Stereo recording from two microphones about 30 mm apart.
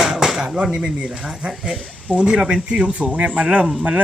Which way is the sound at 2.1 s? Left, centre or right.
Right.